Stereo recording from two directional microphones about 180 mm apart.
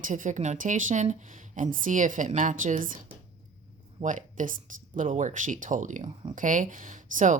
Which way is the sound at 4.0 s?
45° right (ahead or behind).